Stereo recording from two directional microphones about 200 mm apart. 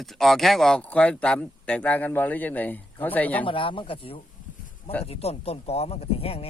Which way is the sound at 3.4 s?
25° left (ahead or behind).